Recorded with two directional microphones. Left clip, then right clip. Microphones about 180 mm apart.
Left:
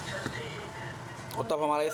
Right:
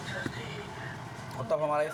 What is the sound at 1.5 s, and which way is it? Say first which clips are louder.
Speech: even; 45° left (ahead or behind).